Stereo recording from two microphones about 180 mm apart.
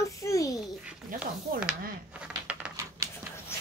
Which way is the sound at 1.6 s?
5° right (ahead or behind).